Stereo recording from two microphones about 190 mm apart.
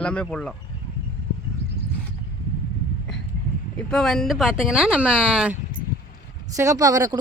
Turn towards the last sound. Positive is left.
turn(degrees=-20)  # may be behind; listen again after turning